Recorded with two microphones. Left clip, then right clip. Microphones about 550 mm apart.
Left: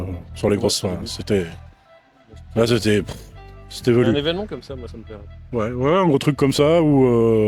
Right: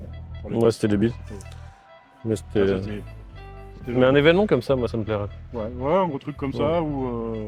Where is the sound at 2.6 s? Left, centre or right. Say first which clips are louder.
Left 11 dB; left.